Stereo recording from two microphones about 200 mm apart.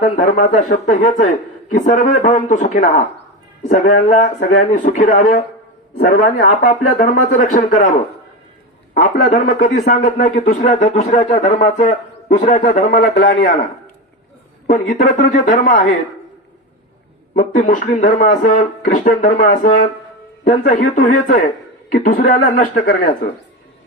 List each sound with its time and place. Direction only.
0.0 s a man's voice: 40° left (ahead or behind)
9.0 s a man's voice: 40° left (ahead or behind)
14.7 s a man's voice: 40° left (ahead or behind)
17.3 s a man's voice: 40° left (ahead or behind)